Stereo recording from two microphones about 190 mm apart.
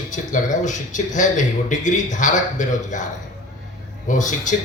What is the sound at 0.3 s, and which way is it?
A man's voice, 40° left (ahead or behind).